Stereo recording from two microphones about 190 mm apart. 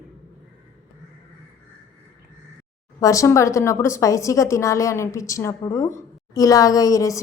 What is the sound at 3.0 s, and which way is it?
A woman's voice, 15° left (ahead or behind).